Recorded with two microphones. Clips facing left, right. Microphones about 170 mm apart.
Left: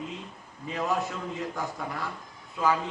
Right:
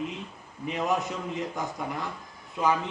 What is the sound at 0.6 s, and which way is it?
A man's voice, 20° right (ahead or behind).